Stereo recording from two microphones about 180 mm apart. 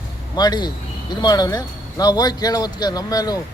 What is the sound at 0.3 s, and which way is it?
Speech, 25° left (ahead or behind).